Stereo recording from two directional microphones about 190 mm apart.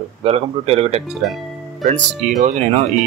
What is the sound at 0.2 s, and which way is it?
Speech, 30° right (ahead or behind).